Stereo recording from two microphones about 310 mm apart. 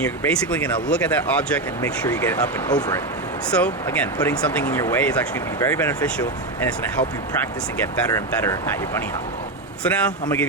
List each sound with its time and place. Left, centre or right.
0.0 s speech: centre
9.8 s speech: centre